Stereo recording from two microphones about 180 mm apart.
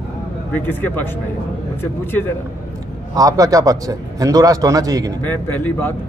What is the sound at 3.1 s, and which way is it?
A man's voice, 20° right (ahead or behind).